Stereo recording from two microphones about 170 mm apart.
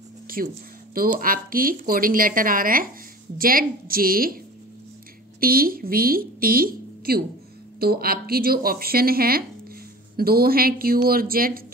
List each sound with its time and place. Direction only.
0.3 s a sound: 60° right (ahead or behind)
0.9 s a woman's voice: 60° right (ahead or behind)
5.4 s a woman's voice: 60° right (ahead or behind)